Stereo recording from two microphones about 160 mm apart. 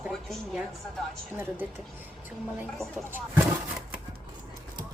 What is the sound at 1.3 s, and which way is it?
A woman's voice, 15° right (ahead or behind).